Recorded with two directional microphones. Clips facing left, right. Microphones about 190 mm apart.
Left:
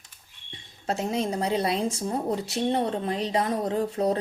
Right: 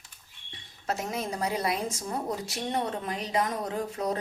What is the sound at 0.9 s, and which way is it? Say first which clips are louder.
A woman's voice: left 5 dB; 30° left (ahead or behind).